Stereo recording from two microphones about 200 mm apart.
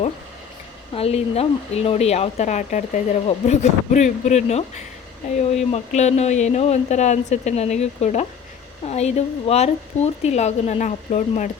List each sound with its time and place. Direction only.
0.9 s speech: 30° left (ahead or behind)